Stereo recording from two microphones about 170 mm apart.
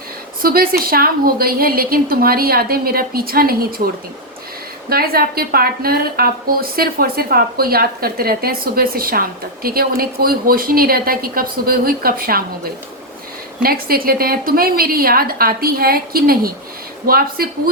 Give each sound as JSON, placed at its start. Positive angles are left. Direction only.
{"t": 0.4, "sound": "a woman's voice", "side_deg": -60}
{"t": 4.9, "sound": "a woman's voice", "side_deg": -60}
{"t": 13.6, "sound": "a woman's voice", "side_deg": -60}